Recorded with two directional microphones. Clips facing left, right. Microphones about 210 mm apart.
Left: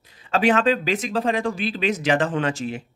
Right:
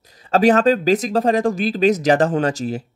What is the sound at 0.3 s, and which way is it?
Speech, 40° right (ahead or behind).